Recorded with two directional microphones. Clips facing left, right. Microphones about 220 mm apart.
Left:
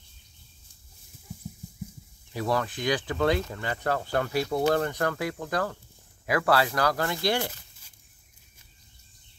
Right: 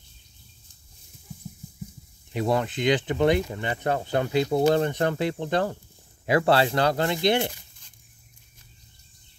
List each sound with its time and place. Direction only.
2.3 s speech: 20° right (ahead or behind)